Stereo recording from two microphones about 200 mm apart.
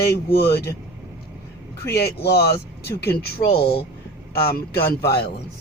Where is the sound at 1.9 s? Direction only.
55° left (ahead or behind).